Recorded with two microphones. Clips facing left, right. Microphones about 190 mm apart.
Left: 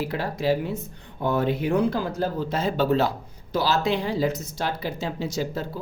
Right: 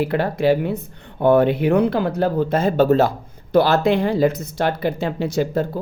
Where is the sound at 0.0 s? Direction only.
60° right (ahead or behind).